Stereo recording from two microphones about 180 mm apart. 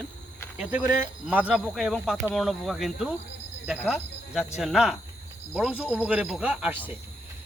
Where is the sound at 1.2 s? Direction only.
5° right (ahead or behind).